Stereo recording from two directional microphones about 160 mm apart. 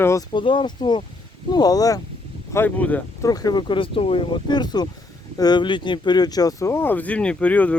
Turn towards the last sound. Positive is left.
turn(degrees=10)  # may be behind; listen again after turning